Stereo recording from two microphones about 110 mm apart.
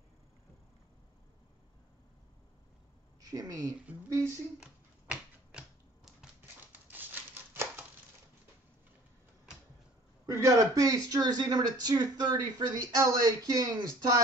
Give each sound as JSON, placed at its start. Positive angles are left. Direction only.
{"t": 3.2, "sound": "speech", "side_deg": -35}
{"t": 4.6, "sound": "a sound", "side_deg": -10}
{"t": 10.2, "sound": "speech", "side_deg": -25}